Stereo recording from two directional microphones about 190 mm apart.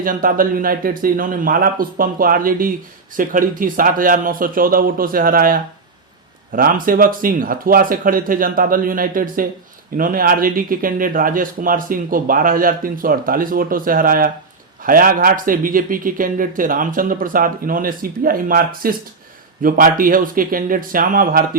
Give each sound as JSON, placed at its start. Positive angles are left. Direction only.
{"t": 0.0, "sound": "a man's voice", "side_deg": -45}